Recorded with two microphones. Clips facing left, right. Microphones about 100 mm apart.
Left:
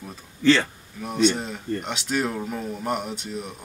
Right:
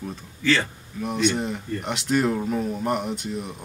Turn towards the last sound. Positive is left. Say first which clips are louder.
# right 3 dB
turn(degrees=0)  # may be behind; listen again after turning